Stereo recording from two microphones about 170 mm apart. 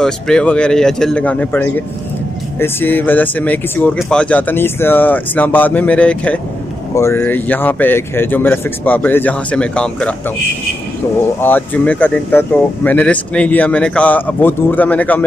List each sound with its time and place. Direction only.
0.0 s a man's voice: 5° left (ahead or behind)
11.4 s speech: 10° left (ahead or behind)